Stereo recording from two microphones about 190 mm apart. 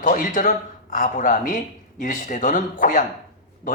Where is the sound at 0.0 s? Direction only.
45° left (ahead or behind).